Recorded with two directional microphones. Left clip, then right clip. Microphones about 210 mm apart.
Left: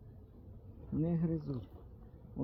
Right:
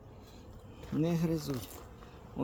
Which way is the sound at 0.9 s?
10° right (ahead or behind).